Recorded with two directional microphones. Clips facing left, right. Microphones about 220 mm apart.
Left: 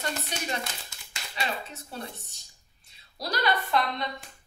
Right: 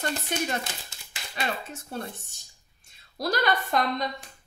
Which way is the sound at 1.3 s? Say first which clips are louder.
Right 2 dB; 50° right (ahead or behind).